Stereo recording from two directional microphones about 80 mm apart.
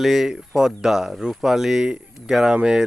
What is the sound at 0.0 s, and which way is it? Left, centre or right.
Speech, centre.